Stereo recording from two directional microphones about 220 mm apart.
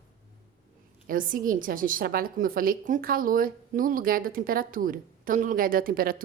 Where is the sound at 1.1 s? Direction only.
40° right (ahead or behind).